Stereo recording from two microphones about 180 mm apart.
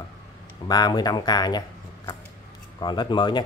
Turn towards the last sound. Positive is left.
turn(degrees=25)  # may be behind; listen again after turning